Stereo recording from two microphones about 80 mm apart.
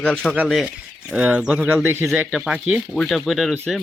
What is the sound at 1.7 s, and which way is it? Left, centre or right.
Speech, right.